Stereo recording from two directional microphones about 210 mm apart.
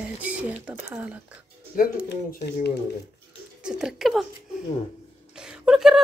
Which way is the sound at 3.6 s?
5° right (ahead or behind).